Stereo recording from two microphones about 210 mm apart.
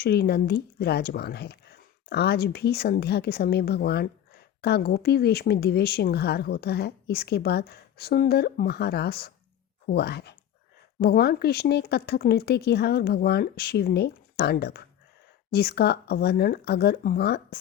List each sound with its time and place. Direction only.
0.0 s speech: 50° left (ahead or behind)